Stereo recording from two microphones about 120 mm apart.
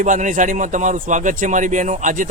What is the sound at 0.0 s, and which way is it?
Speech, 90° right.